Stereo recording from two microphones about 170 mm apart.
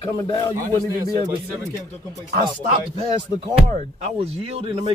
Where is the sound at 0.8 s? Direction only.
20° right (ahead or behind).